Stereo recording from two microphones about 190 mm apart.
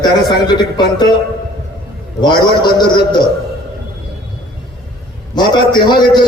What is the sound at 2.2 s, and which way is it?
Speech, 25° left (ahead or behind).